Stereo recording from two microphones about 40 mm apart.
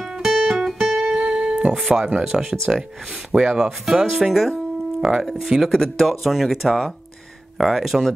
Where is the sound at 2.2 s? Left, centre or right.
Centre.